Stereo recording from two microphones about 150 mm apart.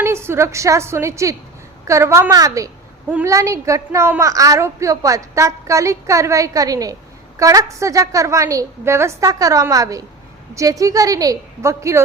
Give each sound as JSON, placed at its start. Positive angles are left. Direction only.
{"t": 0.0, "sound": "a woman's voice", "side_deg": -15}